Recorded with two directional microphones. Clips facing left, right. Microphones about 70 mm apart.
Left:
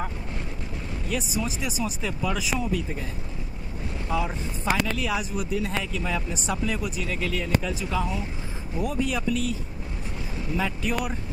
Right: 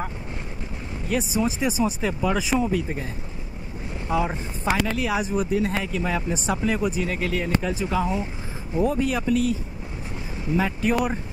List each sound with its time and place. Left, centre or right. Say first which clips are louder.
1.0 s speech: right 6 dB; right
4.1 s speech: right 4 dB; right